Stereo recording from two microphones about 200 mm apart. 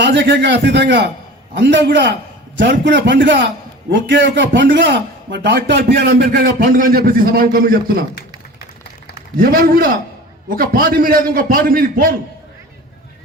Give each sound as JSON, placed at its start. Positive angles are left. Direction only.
{"t": 0.0, "sound": "a man's voice", "side_deg": -65}
{"t": 9.4, "sound": "a man's voice", "side_deg": -45}